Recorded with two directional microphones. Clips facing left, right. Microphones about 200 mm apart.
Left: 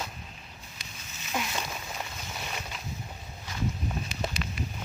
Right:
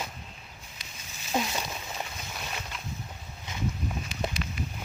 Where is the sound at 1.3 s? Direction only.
25° right (ahead or behind).